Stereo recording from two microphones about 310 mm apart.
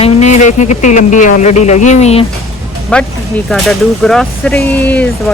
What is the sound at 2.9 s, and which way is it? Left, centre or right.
Speech, centre.